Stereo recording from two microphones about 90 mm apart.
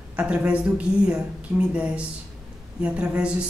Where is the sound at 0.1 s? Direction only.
15° right (ahead or behind).